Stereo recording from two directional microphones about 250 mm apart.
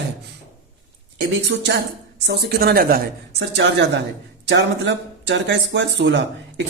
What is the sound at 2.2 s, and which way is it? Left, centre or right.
Speech, right.